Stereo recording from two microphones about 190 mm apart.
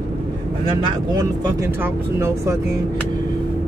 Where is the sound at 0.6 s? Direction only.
20° right (ahead or behind).